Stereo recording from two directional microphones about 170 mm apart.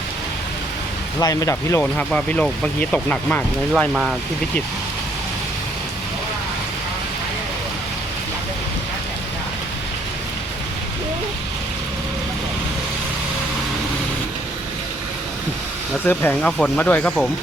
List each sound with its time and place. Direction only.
1.2 s speech: 20° left (ahead or behind)
16.0 s speech: 10° left (ahead or behind)